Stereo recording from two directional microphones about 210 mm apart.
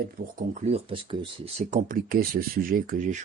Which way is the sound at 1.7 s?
40° right (ahead or behind).